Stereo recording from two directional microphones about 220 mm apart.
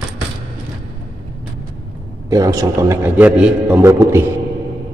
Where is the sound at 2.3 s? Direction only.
15° right (ahead or behind).